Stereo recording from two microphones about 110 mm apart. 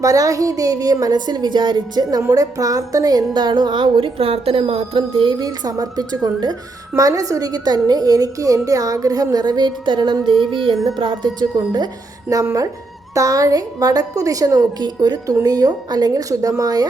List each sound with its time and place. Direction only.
0.0 s a woman's voice: 30° right (ahead or behind); by 5.4 s 50° right (ahead or behind)
5.4 s a woman's voice: 35° right (ahead or behind)
10.5 s music: 50° right (ahead or behind)
10.9 s a woman's voice: 45° right (ahead or behind)